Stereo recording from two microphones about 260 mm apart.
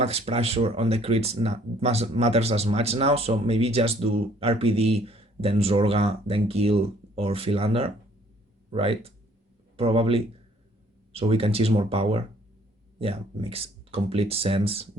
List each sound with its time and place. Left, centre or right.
0.0 s speech: right